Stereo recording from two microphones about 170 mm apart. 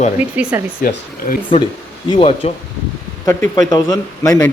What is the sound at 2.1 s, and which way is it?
Speech, 35° left (ahead or behind).